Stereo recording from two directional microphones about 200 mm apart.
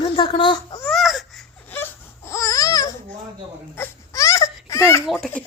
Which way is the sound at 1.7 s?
10° left (ahead or behind).